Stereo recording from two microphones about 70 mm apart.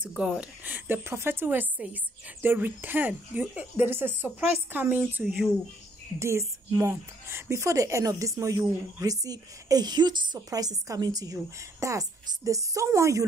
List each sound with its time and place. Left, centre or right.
0.1 s a woman's voice: centre
5.2 s speech: centre
6.1 s a woman's voice: right